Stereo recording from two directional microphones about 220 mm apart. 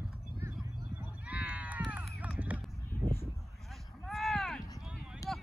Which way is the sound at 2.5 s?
5° left (ahead or behind).